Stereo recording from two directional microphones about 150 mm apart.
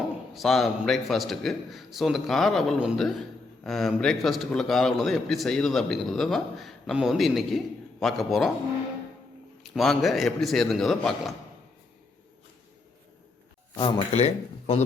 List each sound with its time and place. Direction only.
0.3 s a man's voice: centre (ahead or behind)
9.7 s a man's voice: centre (ahead or behind)
13.7 s speech: 30° left (ahead or behind)